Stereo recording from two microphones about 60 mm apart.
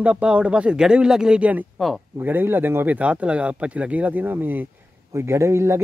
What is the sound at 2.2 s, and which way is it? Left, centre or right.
A man's voice, right.